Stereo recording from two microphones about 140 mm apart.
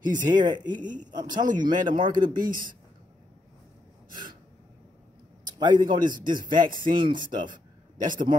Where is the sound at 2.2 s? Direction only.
80° right.